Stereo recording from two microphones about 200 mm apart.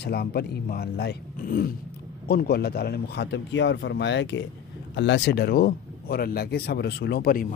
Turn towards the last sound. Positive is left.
turn(degrees=50)  # may be behind; listen again after turning